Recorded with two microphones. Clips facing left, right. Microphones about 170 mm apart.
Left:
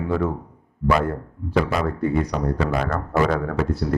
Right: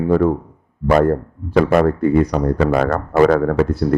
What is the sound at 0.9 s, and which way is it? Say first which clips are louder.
A man's voice: right 7 dB; 50° right (ahead or behind).